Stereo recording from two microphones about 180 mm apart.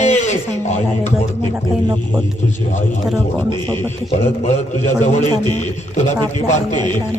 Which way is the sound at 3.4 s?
25° right (ahead or behind).